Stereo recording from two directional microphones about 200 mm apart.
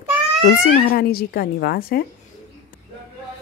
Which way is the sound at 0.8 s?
50° left (ahead or behind).